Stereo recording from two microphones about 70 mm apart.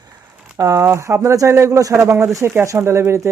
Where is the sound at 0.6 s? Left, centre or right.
Right.